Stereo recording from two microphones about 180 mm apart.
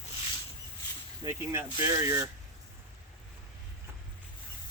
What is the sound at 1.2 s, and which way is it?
Speech, 20° right (ahead or behind).